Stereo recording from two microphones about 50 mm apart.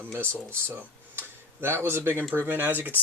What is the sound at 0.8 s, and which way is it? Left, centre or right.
Tick-tock, right.